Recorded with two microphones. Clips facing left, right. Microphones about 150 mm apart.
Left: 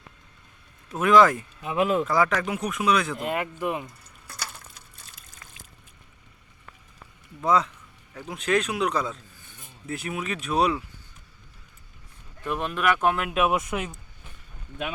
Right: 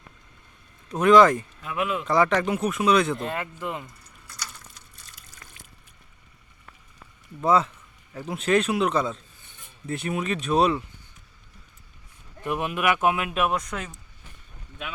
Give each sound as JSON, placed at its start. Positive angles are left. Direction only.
{"t": 0.9, "sound": "speech", "side_deg": 5}
{"t": 1.6, "sound": "speech", "side_deg": 30}
{"t": 2.4, "sound": "speech", "side_deg": 0}
{"t": 3.2, "sound": "speech", "side_deg": 15}
{"t": 4.3, "sound": "water", "side_deg": 55}
{"t": 7.4, "sound": "speech", "side_deg": -5}
{"t": 12.4, "sound": "speech", "side_deg": -15}
{"t": 13.7, "sound": "speech", "side_deg": 15}